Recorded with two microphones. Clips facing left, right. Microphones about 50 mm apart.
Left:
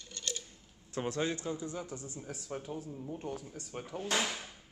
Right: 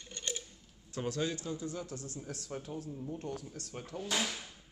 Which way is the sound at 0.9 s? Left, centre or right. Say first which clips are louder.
Left 1 dB; left.